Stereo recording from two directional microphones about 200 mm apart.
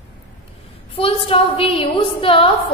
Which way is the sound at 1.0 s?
25° left (ahead or behind).